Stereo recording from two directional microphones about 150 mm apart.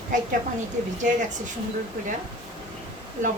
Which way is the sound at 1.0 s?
55° right (ahead or behind).